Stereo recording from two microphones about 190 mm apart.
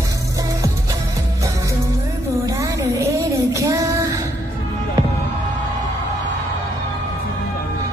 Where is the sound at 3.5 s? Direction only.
15° right (ahead or behind).